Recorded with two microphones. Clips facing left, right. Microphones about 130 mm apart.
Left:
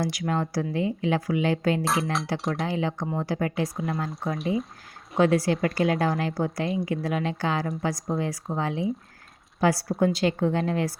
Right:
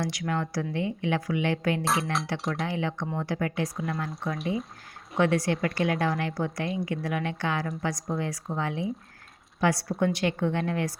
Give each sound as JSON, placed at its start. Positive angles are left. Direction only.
{"t": 0.0, "sound": "a woman's voice", "side_deg": 25}
{"t": 1.8, "sound": "speech", "side_deg": 0}
{"t": 2.6, "sound": "a woman's voice", "side_deg": 30}
{"t": 4.4, "sound": "speech", "side_deg": 0}
{"t": 5.1, "sound": "a woman's voice", "side_deg": 25}